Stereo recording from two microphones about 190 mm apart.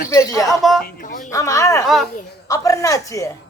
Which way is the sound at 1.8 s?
Centre (ahead or behind).